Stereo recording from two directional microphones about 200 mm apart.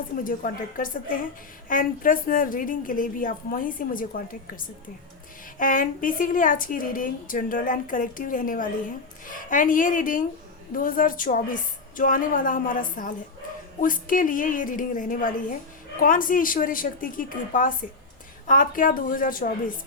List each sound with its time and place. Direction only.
0.3 s a woman's voice: 45° left (ahead or behind)